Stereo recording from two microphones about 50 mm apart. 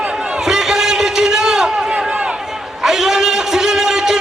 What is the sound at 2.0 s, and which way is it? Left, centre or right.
Run, right.